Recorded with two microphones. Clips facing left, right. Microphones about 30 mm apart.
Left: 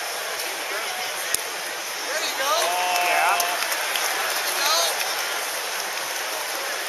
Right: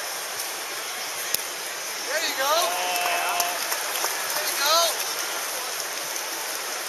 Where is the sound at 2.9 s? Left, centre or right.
Left.